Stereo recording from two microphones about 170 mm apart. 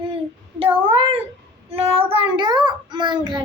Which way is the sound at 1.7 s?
35° right (ahead or behind).